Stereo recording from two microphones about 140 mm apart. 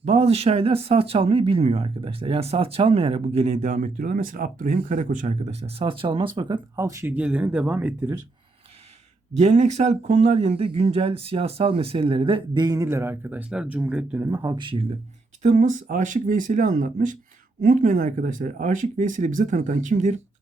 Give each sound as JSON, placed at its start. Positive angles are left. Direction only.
{"t": 0.0, "sound": "speech", "side_deg": -50}
{"t": 9.3, "sound": "speech", "side_deg": -55}
{"t": 14.3, "sound": "speech", "side_deg": -20}
{"t": 14.6, "sound": "speech", "side_deg": -40}
{"t": 15.4, "sound": "speech", "side_deg": -65}
{"t": 17.6, "sound": "speech", "side_deg": -80}